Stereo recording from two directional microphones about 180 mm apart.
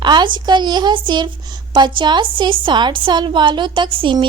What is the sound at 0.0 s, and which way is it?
A woman's voice, 25° right (ahead or behind).